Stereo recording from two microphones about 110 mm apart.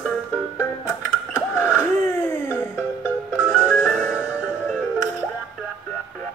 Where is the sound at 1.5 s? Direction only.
20° left (ahead or behind).